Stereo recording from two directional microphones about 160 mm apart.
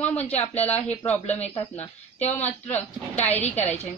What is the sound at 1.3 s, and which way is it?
Speech, 40° left (ahead or behind).